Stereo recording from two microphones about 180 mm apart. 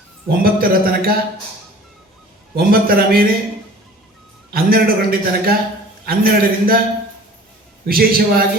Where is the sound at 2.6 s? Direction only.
55° right (ahead or behind).